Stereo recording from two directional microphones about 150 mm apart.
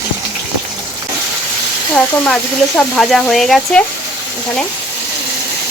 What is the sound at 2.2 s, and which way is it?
Speech, 5° left (ahead or behind).